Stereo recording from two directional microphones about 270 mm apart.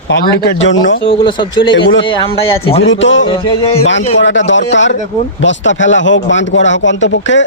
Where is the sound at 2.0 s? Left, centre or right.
Centre.